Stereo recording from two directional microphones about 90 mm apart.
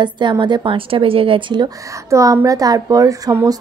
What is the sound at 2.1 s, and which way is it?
Speech, 40° right (ahead or behind).